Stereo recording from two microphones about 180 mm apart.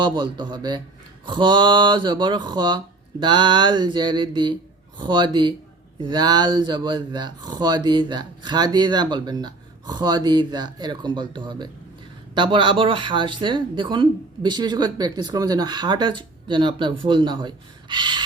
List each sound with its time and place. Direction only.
0.0 s speech: 25° right (ahead or behind)